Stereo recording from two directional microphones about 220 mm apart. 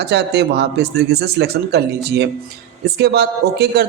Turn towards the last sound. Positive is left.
turn(degrees=-50)  # may be behind; listen again after turning